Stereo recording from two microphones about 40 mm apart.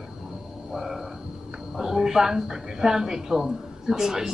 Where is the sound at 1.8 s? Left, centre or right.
Centre.